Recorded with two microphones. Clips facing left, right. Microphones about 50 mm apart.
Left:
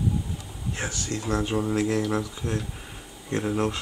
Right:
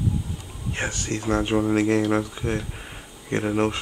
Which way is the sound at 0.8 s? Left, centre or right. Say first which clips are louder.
Right 4 dB; right.